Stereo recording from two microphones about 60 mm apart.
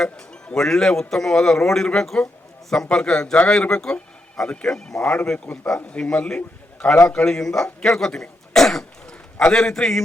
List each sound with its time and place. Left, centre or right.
0.0 s a man's voice: centre
7.3 s throat clearing: centre
9.5 s a man's voice: centre